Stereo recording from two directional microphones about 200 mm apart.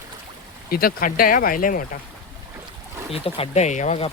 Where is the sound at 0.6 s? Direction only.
45° left (ahead or behind).